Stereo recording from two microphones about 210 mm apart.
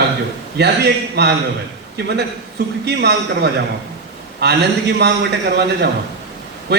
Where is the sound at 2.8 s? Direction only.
50° right (ahead or behind).